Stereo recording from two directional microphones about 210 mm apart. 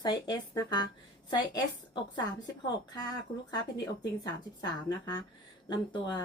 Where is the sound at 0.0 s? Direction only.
20° left (ahead or behind).